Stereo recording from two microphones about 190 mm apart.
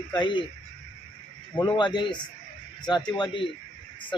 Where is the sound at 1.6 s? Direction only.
25° left (ahead or behind).